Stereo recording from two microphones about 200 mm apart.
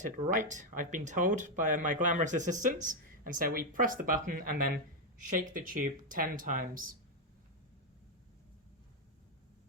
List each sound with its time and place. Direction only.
0.3 s speech: 40° right (ahead or behind)